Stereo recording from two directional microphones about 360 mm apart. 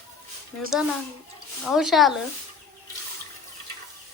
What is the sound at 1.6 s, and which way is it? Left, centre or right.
Speech, centre.